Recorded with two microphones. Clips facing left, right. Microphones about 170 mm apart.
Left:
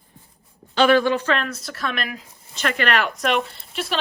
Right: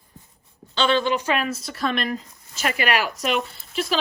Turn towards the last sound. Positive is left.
turn(degrees=0)  # may be behind; listen again after turning